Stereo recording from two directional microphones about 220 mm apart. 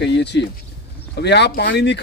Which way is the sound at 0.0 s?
50° left (ahead or behind).